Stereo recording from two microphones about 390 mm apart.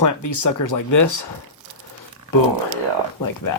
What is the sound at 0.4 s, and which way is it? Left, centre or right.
Speech, left.